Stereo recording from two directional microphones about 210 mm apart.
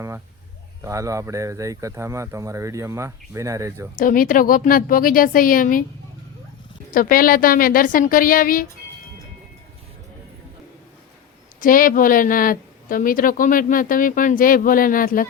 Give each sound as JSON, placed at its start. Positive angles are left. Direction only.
{"t": 0.8, "sound": "speech", "side_deg": -15}
{"t": 3.9, "sound": "a woman's voice", "side_deg": 40}
{"t": 6.9, "sound": "a woman's voice", "side_deg": 40}
{"t": 11.6, "sound": "a woman's voice", "side_deg": 40}